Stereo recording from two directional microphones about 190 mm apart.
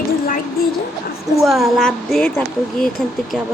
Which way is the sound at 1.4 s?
Centre (ahead or behind).